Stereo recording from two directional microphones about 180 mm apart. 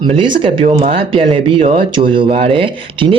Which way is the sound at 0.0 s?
25° right (ahead or behind).